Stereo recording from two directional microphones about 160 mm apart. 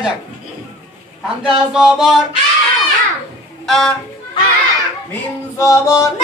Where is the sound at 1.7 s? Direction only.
5° right (ahead or behind).